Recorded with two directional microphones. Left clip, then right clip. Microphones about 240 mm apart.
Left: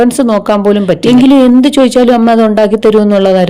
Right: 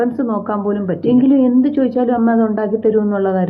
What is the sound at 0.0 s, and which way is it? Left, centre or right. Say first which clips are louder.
A woman's voice: left 9 dB; left.